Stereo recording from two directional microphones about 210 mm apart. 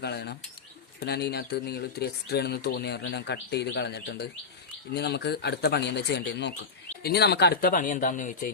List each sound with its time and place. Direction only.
0.0 s bird: 50° left (ahead or behind)
0.9 s speech: 50° left (ahead or behind)